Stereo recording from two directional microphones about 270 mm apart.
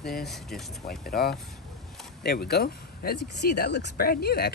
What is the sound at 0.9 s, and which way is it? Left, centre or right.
Speech, left.